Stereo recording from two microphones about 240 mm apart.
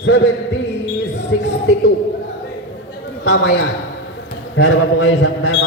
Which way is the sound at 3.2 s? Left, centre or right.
Left.